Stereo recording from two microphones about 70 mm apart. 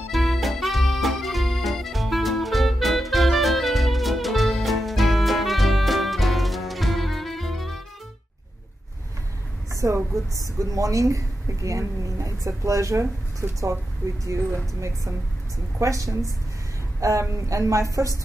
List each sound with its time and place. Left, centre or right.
0.1 s music: centre
9.7 s a sound: right
10.3 s a woman's voice: right